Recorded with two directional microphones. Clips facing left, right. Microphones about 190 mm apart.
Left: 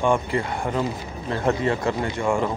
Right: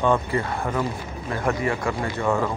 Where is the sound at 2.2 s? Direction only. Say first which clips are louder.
Even; 10° left (ahead or behind).